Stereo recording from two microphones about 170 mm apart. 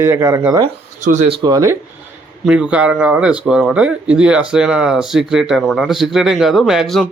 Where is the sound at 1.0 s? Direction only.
45° right (ahead or behind).